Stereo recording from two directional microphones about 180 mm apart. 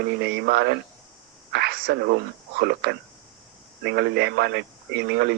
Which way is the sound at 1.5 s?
65° right (ahead or behind).